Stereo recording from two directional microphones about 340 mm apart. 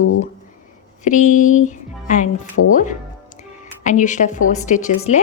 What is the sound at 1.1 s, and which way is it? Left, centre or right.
Speech, left.